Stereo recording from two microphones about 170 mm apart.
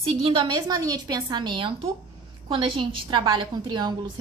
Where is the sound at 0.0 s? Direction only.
35° right (ahead or behind).